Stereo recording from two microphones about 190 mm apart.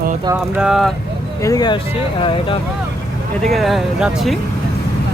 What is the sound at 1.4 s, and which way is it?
Speech, 20° left (ahead or behind).